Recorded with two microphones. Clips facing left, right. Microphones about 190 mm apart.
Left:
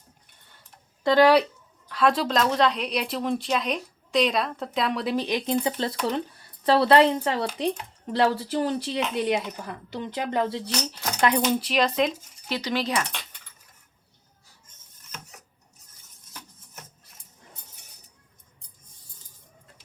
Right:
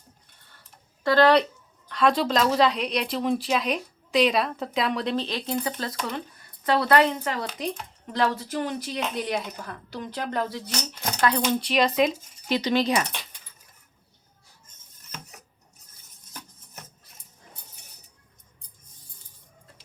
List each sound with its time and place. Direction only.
1.0 s speech: 10° left (ahead or behind)
5.1 s speech: 15° left (ahead or behind)
11.4 s speech: centre (ahead or behind)
12.5 s cutlery: 20° right (ahead or behind)